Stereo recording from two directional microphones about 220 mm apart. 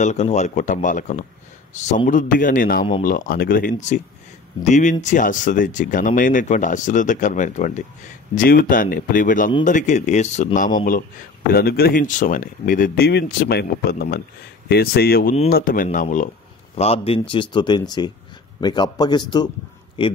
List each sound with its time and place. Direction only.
0.0 s speech: 30° left (ahead or behind)